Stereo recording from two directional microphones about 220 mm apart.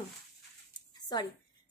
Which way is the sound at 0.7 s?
20° left (ahead or behind).